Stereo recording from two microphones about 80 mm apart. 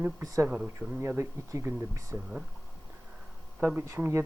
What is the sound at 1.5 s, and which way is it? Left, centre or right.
Speech, right.